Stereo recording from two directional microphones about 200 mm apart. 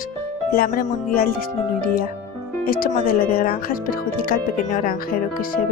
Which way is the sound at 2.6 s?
45° left (ahead or behind).